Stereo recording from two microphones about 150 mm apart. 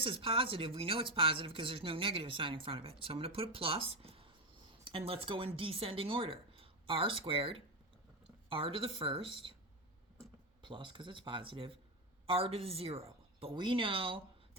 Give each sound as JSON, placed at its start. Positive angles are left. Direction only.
{"t": 0.0, "sound": "speech", "side_deg": -35}
{"t": 10.6, "sound": "speech", "side_deg": -35}